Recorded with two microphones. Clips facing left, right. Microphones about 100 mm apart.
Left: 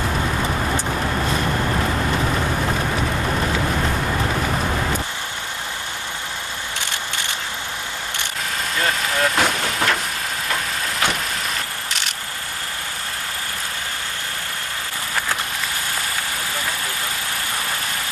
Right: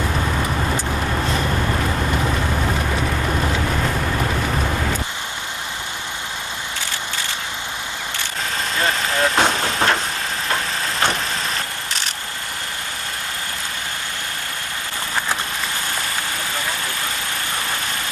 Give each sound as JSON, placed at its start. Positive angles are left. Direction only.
{"t": 8.8, "sound": "vehicle", "side_deg": -30}